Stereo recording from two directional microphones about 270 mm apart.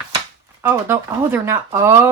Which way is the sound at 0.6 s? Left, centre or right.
Centre.